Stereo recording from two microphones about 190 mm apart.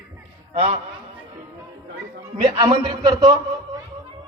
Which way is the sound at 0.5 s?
35° right (ahead or behind).